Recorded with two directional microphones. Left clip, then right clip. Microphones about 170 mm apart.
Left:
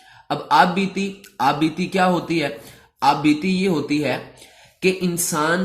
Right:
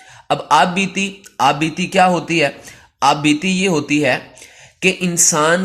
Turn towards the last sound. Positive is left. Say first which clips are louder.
# right 6 dB
turn(degrees=-30)  # may be behind; listen again after turning